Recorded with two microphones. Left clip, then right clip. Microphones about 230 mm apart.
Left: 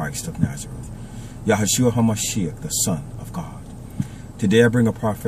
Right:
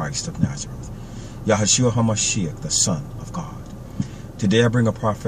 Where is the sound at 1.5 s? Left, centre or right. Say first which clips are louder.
Even; centre.